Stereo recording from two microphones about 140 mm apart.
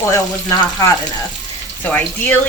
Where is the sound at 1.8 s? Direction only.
10° left (ahead or behind).